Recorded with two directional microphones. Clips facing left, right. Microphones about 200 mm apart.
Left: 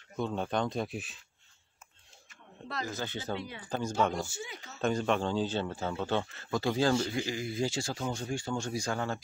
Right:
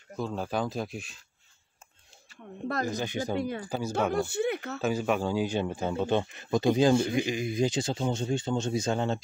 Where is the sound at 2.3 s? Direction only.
35° right (ahead or behind).